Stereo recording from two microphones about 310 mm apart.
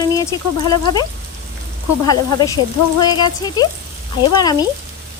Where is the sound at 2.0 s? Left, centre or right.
Centre.